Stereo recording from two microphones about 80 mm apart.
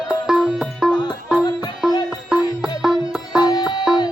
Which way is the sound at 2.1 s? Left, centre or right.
Centre.